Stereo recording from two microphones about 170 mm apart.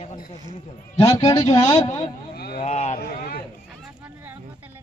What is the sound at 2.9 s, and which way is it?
Speech, 65° left (ahead or behind).